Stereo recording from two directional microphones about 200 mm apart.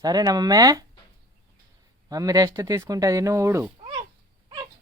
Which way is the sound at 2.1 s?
20° right (ahead or behind).